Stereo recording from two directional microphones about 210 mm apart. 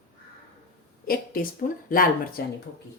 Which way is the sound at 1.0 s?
45° left (ahead or behind).